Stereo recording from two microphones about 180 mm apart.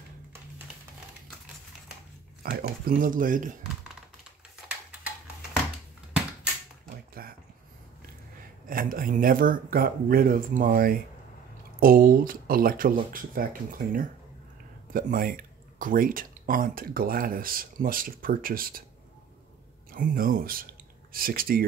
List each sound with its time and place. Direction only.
2.5 s speech: 55° right (ahead or behind)
7.2 s a sound: 55° right (ahead or behind)
8.6 s speech: 50° right (ahead or behind)
19.9 s speech: 50° right (ahead or behind)